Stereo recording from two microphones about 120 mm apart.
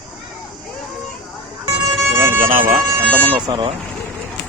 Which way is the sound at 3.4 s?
40° right (ahead or behind).